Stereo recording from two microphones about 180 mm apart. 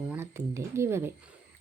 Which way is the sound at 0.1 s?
15° right (ahead or behind).